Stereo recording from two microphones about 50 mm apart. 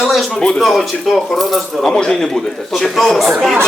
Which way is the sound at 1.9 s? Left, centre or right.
Centre.